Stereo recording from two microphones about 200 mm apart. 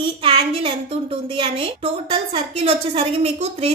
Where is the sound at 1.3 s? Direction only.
25° right (ahead or behind).